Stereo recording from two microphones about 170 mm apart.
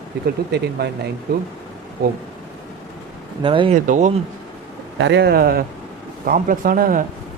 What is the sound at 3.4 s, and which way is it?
Speech, 30° right (ahead or behind).